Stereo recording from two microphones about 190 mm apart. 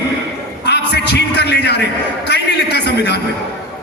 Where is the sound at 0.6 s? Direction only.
60° left (ahead or behind).